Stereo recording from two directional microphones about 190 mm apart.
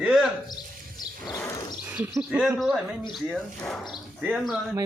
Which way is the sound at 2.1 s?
5° right (ahead or behind).